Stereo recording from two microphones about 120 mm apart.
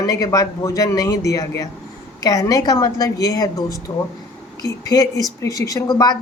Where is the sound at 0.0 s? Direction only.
25° left (ahead or behind).